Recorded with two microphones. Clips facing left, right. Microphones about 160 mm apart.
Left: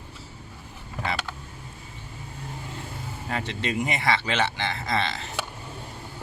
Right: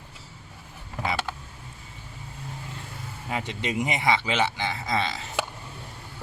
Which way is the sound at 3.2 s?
10° right (ahead or behind).